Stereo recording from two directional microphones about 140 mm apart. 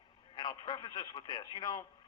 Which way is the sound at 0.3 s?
30° left (ahead or behind).